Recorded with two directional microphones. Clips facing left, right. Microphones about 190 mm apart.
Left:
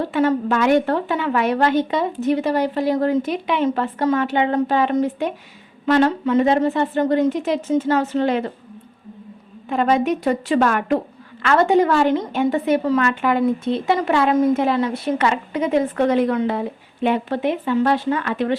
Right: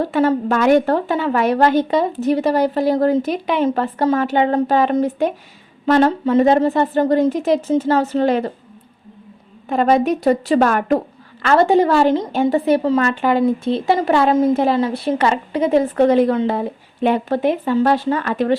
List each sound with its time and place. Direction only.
0.1 s a woman's voice: 40° right (ahead or behind)
9.6 s a woman's voice: 40° right (ahead or behind)